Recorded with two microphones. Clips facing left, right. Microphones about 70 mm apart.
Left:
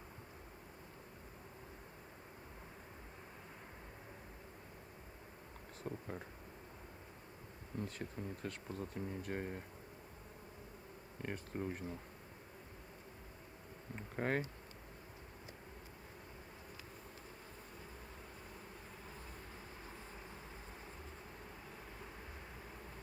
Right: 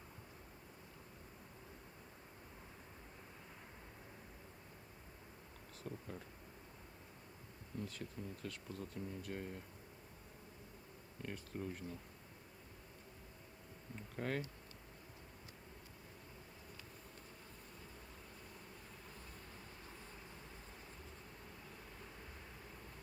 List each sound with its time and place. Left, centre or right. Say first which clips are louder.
5.8 s speech: left 4 dB; left
7.8 s speech: left 3 dB; left
11.2 s speech: left 3 dB; left
13.9 s a sound: left 4 dB; left